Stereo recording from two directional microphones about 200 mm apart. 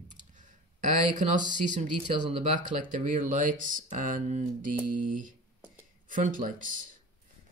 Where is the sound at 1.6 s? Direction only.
40° right (ahead or behind).